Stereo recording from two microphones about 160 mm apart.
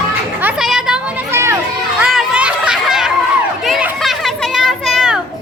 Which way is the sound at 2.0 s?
5° right (ahead or behind).